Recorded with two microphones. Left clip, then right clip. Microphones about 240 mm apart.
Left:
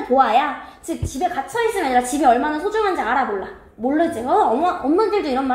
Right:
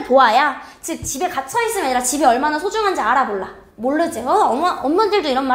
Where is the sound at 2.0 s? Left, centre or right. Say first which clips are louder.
Even; right.